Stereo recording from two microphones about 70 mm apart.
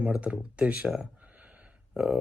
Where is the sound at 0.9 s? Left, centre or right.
Centre.